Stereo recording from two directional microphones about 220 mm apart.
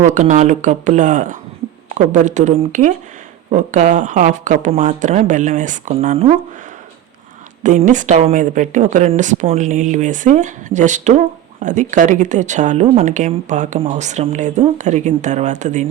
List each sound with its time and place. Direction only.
0.0 s speech: 35° right (ahead or behind)
7.6 s speech: 35° right (ahead or behind)